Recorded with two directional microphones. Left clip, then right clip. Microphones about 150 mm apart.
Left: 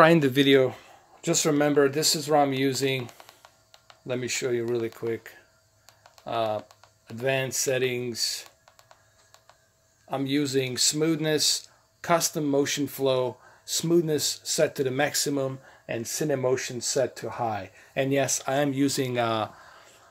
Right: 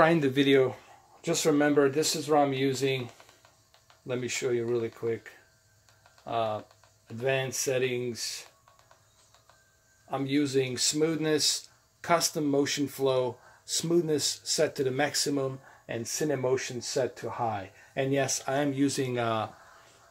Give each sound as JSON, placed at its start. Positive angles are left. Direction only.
{"t": 0.0, "sound": "speech", "side_deg": 55}
{"t": 10.0, "sound": "speech", "side_deg": 55}